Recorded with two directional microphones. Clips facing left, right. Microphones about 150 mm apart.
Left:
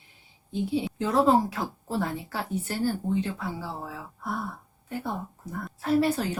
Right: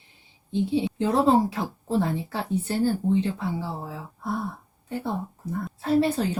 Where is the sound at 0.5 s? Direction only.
30° right (ahead or behind).